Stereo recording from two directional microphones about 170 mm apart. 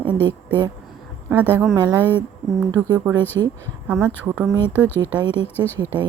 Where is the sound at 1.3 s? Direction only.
10° right (ahead or behind).